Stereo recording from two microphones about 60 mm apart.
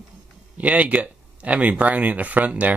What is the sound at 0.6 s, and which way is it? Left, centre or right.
Speech, right.